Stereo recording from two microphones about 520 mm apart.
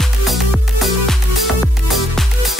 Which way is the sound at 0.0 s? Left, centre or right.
Centre.